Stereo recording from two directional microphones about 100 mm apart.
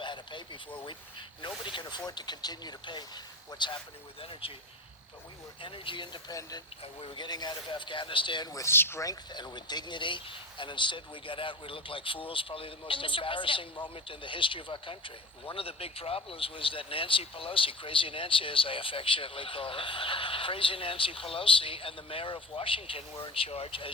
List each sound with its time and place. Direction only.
0.0 s a man's voice: 50° left (ahead or behind)
4.2 s speech: 65° left (ahead or behind)
5.6 s a man's voice: 60° left (ahead or behind); by 8.7 s 35° left (ahead or behind)
8.7 s speech: 25° left (ahead or behind)
9.0 s speech: 45° left (ahead or behind); by 23.9 s 70° left (ahead or behind)